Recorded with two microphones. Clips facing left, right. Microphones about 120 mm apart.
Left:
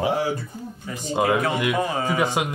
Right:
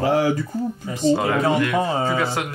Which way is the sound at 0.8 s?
25° right (ahead or behind).